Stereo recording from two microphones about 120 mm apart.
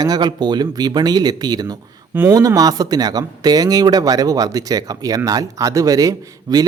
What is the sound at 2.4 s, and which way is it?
A man's voice, 30° right (ahead or behind).